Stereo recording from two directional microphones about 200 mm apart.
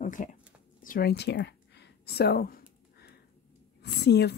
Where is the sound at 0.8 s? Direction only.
50° left (ahead or behind).